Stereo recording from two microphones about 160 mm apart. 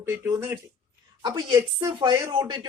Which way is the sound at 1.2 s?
25° right (ahead or behind).